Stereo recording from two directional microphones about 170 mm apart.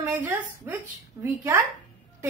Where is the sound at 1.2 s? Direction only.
15° right (ahead or behind).